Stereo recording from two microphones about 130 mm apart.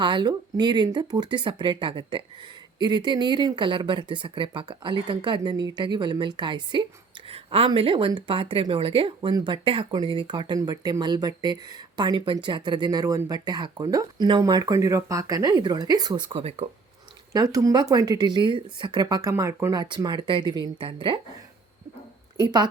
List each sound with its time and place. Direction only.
0.0 s speech: 35° right (ahead or behind)
16.4 s speech: 50° right (ahead or behind)
17.3 s speech: 25° right (ahead or behind)
19.7 s speech: 35° right (ahead or behind)
22.4 s speech: 35° right (ahead or behind)